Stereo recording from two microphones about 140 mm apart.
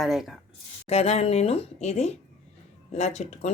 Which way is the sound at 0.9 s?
50° left (ahead or behind).